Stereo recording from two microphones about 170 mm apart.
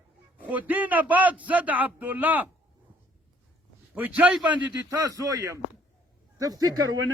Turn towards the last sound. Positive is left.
turn(degrees=-20)  # may be behind; listen again after turning